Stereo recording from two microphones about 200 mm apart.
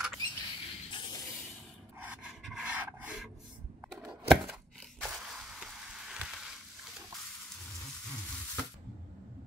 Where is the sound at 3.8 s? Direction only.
5° right (ahead or behind).